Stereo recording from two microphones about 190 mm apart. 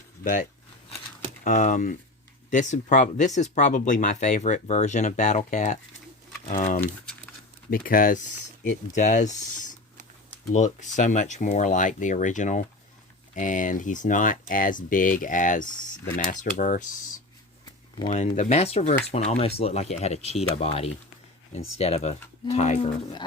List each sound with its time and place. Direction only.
1.5 s speech: 45° left (ahead or behind)
18.0 s speech: 35° left (ahead or behind)